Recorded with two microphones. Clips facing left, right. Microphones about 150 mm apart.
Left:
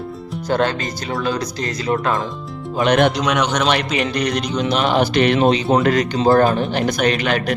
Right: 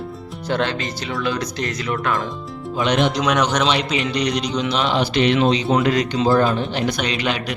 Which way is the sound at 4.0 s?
50° left (ahead or behind).